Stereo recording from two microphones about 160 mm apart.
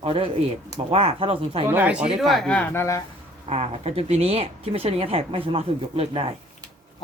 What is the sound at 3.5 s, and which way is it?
Speech, 40° right (ahead or behind).